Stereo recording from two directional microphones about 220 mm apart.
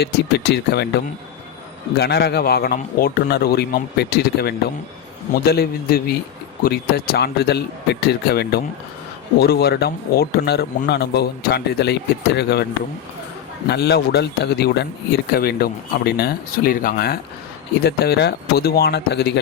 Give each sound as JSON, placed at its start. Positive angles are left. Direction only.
{"t": 0.0, "sound": "speech", "side_deg": 50}
{"t": 13.7, "sound": "speech", "side_deg": 50}